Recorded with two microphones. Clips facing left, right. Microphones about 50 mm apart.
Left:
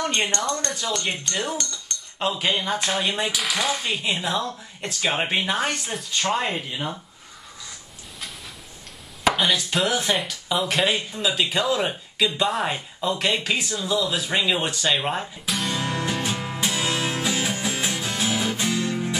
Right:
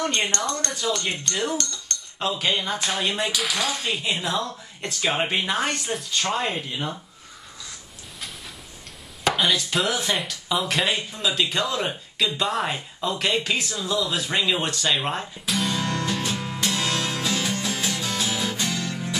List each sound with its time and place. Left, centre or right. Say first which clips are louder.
0.2 s speech: left 1 dB; centre
3.5 s speech: left 1 dB; centre
3.9 s speech: left 1 dB; centre
9.2 s speech: left 1 dB; centre
15.7 s music: even; centre